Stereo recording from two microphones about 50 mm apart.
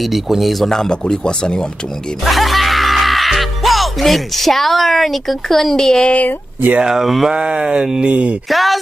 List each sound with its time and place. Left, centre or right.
0.0 s speech: centre
2.2 s speech: centre
6.8 s speech: centre
7.3 s speech: centre
8.5 s speech: centre